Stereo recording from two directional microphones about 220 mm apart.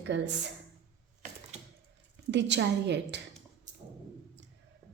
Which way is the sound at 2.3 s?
55° right (ahead or behind).